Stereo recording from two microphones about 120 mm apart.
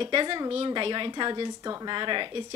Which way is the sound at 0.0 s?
45° right (ahead or behind).